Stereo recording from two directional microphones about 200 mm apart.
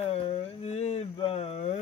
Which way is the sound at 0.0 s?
30° left (ahead or behind).